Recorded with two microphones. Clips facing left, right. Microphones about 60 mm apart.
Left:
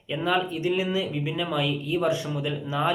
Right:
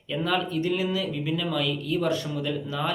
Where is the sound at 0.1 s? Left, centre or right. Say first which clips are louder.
Left 1 dB; centre.